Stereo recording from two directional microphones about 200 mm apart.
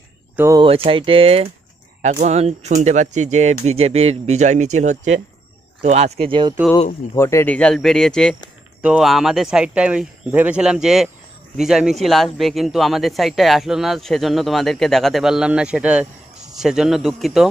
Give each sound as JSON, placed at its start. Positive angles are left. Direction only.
{"t": 0.6, "sound": "speech", "side_deg": -25}
{"t": 7.2, "sound": "speech", "side_deg": 15}